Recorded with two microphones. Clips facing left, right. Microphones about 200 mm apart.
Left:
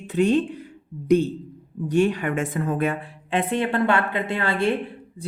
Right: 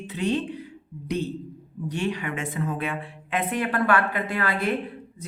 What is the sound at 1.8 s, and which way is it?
Speech, 50° left (ahead or behind).